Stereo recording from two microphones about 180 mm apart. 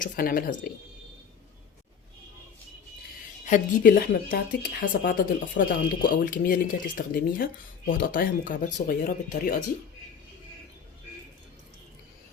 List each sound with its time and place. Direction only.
0.0 s speech: 55° left (ahead or behind)
3.4 s speech: 50° left (ahead or behind)